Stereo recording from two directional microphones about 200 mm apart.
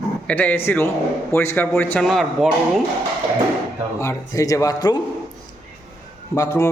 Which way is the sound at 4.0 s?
15° left (ahead or behind).